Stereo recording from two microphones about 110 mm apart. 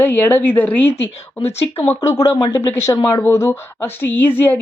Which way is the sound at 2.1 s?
30° left (ahead or behind).